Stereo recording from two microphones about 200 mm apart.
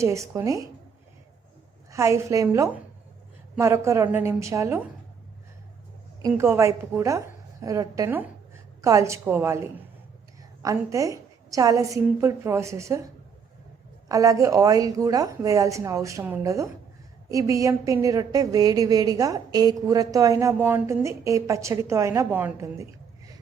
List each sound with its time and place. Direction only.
0.0 s a woman's voice: 15° right (ahead or behind)
1.9 s a woman's voice: 15° right (ahead or behind)
6.2 s a woman's voice: 15° right (ahead or behind)
14.1 s a woman's voice: 15° right (ahead or behind)